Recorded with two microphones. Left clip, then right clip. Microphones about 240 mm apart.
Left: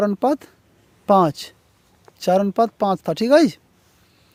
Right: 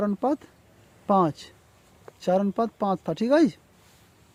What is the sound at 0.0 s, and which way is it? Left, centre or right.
Speech, left.